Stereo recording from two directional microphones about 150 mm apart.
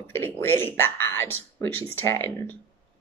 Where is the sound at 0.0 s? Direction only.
15° left (ahead or behind).